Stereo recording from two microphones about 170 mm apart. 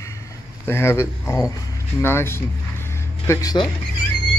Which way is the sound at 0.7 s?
15° left (ahead or behind).